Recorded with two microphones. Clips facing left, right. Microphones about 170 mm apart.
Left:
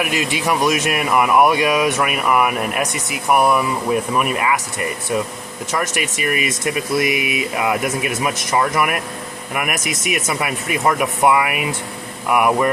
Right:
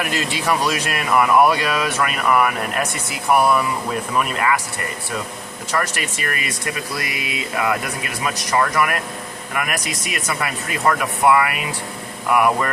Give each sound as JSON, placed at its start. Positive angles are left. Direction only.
{"t": 0.0, "sound": "speech", "side_deg": 15}
{"t": 4.2, "sound": "speech", "side_deg": 15}
{"t": 5.7, "sound": "speech", "side_deg": 20}